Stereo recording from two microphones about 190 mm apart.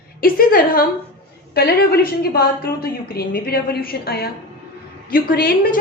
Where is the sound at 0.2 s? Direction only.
50° left (ahead or behind).